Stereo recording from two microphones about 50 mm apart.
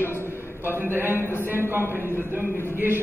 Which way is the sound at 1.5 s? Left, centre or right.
Right.